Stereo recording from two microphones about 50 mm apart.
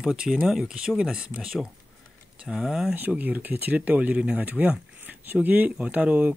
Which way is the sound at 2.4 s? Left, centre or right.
Centre.